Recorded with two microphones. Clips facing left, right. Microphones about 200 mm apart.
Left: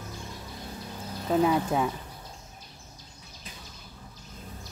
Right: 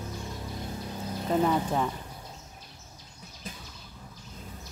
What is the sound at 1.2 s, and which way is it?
Speech, 5° left (ahead or behind).